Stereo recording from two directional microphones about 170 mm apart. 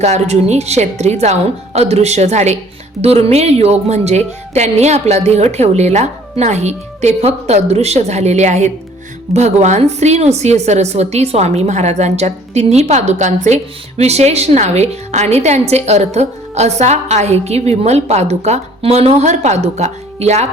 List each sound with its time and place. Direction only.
0.0 s a woman's voice: 40° right (ahead or behind)